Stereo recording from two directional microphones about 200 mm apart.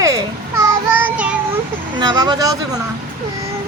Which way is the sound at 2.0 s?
20° right (ahead or behind).